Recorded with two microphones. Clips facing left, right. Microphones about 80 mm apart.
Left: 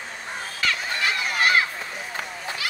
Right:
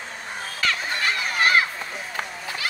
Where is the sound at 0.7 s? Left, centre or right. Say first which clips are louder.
Even; right.